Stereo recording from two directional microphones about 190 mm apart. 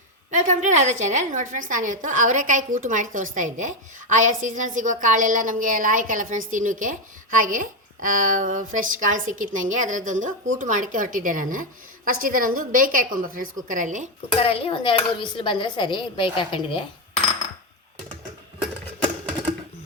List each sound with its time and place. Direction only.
0.3 s a woman's voice: 40° right (ahead or behind)
14.3 s speech: 30° left (ahead or behind)